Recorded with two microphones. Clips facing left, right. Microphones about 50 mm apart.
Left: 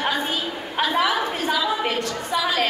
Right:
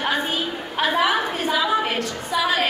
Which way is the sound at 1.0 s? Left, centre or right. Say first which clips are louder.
Right 1 dB; right.